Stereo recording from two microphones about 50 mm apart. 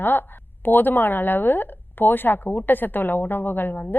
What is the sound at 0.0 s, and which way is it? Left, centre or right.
A woman's voice, left.